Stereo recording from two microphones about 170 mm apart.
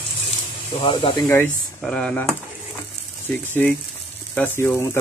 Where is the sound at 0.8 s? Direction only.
30° left (ahead or behind).